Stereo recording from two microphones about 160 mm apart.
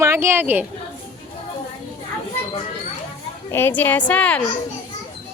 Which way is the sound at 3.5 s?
10° left (ahead or behind).